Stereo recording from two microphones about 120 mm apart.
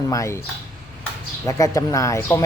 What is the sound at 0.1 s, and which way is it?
Speech, 25° left (ahead or behind).